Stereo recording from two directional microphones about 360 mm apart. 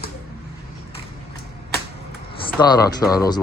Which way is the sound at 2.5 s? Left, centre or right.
Centre.